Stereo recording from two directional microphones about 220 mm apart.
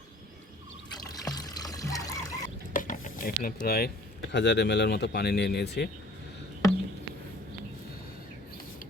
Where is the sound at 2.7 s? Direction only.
35° left (ahead or behind).